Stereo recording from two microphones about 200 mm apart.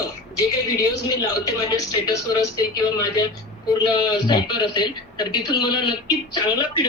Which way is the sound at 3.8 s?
20° left (ahead or behind).